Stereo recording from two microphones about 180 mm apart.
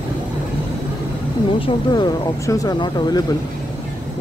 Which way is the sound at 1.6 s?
25° left (ahead or behind).